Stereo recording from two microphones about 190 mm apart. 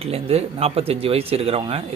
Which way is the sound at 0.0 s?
30° right (ahead or behind).